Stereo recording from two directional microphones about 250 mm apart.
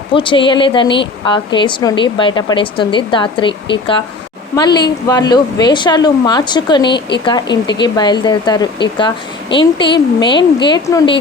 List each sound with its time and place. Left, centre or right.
0.1 s a woman's voice: centre